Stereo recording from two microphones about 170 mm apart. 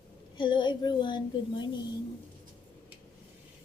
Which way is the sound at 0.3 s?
30° left (ahead or behind).